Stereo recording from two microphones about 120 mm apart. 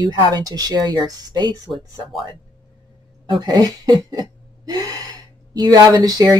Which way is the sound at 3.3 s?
35° right (ahead or behind).